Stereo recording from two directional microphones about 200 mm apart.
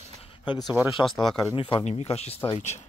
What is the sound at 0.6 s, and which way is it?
Speech, 10° right (ahead or behind).